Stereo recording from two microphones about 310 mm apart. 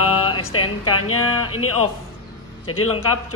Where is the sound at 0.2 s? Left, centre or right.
Centre.